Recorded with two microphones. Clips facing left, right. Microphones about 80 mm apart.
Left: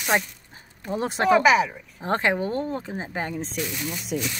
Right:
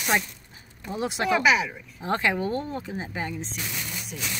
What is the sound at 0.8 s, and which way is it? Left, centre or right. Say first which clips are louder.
A woman's voice: left 4 dB; left.